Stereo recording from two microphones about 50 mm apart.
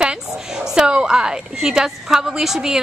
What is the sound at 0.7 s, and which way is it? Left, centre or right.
A woman's voice, centre.